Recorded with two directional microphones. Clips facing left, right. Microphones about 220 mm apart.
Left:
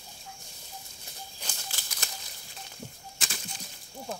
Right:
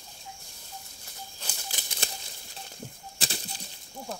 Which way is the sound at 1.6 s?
25° right (ahead or behind).